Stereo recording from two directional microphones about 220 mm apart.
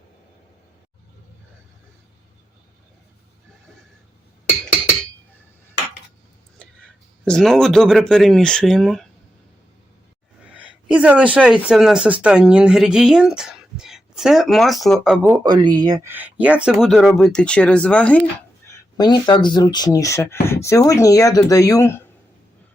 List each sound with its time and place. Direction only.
7.3 s speech: centre (ahead or behind)
10.5 s speech: 5° right (ahead or behind)
15.2 s speech: 10° right (ahead or behind); by 18.2 s 5° left (ahead or behind)
18.9 s speech: 20° left (ahead or behind)